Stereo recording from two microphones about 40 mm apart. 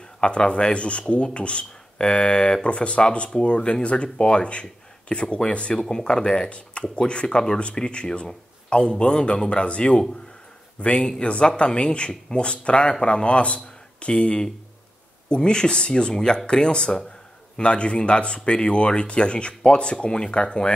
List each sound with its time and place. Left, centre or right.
0.2 s speech: left